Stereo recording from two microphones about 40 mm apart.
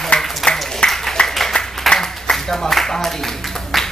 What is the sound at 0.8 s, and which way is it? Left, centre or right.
Applause, left.